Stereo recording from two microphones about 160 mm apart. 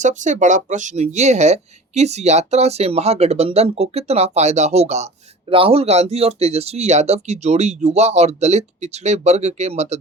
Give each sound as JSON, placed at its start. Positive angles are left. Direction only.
{"t": 0.0, "sound": "speech", "side_deg": -50}